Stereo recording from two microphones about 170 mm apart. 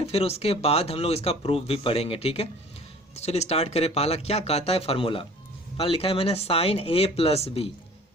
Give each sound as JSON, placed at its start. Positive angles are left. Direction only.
{"t": 0.0, "sound": "speech", "side_deg": 35}